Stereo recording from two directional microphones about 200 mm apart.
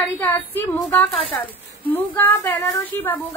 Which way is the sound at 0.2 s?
10° left (ahead or behind).